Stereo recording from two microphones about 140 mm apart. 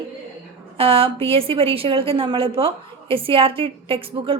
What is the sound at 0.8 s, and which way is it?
A woman's voice, 40° right (ahead or behind).